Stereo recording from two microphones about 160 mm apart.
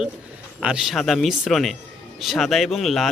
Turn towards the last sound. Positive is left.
turn(degrees=0)  # may be behind; listen again after turning